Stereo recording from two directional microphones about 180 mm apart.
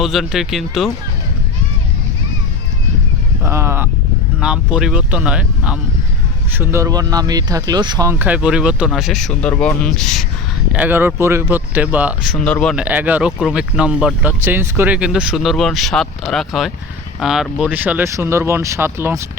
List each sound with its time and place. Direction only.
0.0 s speech: centre (ahead or behind)
3.4 s a sound: 15° right (ahead or behind)
4.4 s speech: 5° right (ahead or behind); by 8.1 s 25° right (ahead or behind)
8.2 s speech: 5° right (ahead or behind)
10.7 s speech: 10° right (ahead or behind); by 12.7 s 5° left (ahead or behind)
12.7 s speech: 10° right (ahead or behind)